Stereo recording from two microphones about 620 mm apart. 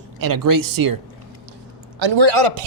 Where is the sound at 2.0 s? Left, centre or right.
Right.